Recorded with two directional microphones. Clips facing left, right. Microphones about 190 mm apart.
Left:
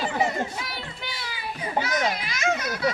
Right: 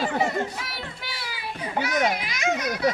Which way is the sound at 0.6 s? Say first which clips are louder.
Left 1 dB; 5° right (ahead or behind).